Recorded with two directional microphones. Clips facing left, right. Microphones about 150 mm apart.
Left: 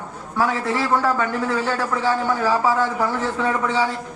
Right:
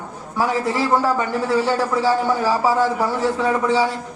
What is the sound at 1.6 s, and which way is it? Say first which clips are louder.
Speech: right 3 dB; 35° right (ahead or behind).